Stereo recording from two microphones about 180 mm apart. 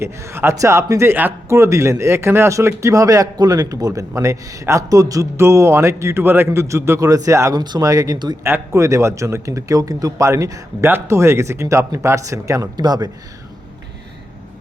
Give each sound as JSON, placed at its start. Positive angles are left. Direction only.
{"t": 0.0, "sound": "a man's voice", "side_deg": -15}